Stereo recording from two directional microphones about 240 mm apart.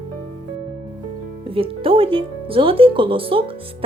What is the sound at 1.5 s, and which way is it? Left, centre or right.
Speech, right.